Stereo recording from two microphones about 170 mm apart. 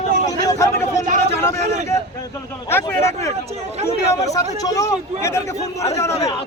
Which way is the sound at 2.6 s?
15° left (ahead or behind).